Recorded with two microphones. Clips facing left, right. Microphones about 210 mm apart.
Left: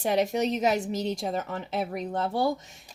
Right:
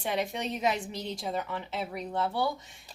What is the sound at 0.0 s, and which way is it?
Speech, 40° left (ahead or behind).